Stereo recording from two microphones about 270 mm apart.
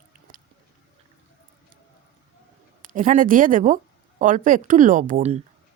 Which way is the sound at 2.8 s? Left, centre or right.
Right.